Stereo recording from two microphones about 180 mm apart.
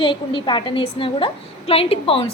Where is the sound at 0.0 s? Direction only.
25° left (ahead or behind).